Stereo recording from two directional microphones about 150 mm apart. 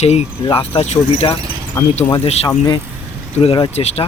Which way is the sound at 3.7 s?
45° left (ahead or behind).